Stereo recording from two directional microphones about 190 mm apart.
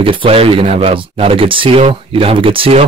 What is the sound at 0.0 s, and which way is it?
Speech, 30° right (ahead or behind).